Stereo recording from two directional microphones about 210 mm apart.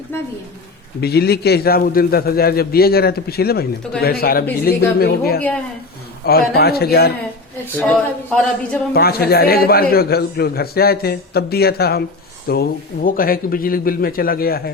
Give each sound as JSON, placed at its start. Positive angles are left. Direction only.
{"t": 0.1, "sound": "speech", "side_deg": 10}
{"t": 1.0, "sound": "a man's voice", "side_deg": 50}
{"t": 7.8, "sound": "speech", "side_deg": 5}
{"t": 8.9, "sound": "a man's voice", "side_deg": 45}